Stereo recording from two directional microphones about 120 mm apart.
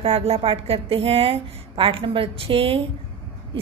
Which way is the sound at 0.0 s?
55° right (ahead or behind).